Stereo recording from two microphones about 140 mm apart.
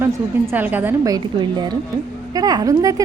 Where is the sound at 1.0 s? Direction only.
30° right (ahead or behind).